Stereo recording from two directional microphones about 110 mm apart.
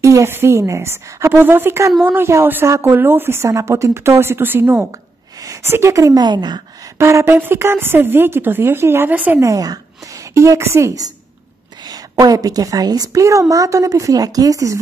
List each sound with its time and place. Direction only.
0.0 s a woman's voice: 25° right (ahead or behind)
7.0 s speech: 25° right (ahead or behind)
9.4 s a woman's voice: 30° right (ahead or behind)
11.9 s a woman's voice: 35° right (ahead or behind)